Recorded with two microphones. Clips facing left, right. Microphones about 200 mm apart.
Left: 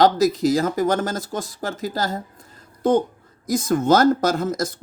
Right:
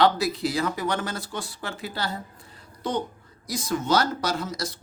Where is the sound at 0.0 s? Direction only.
40° left (ahead or behind).